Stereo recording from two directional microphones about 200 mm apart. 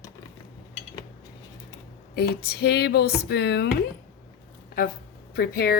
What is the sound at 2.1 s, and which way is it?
Speech, 50° left (ahead or behind).